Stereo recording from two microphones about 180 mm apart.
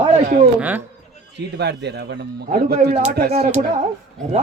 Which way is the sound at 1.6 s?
70° right (ahead or behind).